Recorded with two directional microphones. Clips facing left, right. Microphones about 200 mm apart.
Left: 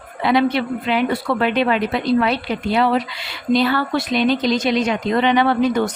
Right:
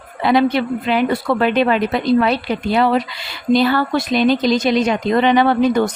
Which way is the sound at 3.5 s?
40° right (ahead or behind).